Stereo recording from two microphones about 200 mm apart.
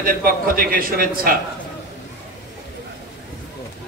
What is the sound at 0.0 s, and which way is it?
A man's voice, 45° right (ahead or behind).